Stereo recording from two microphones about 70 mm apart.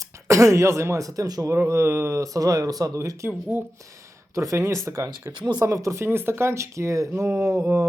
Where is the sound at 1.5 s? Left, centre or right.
Right.